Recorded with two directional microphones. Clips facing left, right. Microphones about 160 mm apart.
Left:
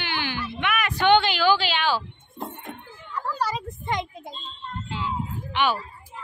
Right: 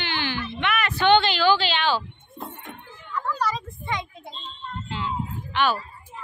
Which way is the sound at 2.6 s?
35° left (ahead or behind).